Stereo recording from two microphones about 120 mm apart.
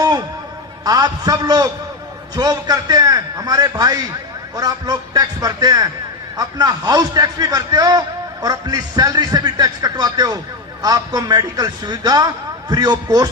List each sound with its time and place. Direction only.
0.9 s a man's voice: 30° right (ahead or behind)